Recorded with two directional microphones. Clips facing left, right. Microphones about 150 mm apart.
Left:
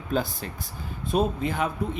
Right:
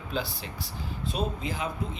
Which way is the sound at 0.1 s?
50° left (ahead or behind).